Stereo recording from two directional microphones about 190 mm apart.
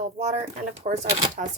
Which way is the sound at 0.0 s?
35° right (ahead or behind).